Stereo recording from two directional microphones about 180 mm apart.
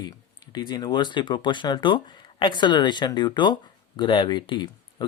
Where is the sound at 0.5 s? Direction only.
25° left (ahead or behind).